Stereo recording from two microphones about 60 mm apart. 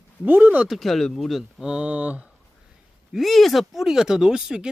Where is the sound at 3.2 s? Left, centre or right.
Centre.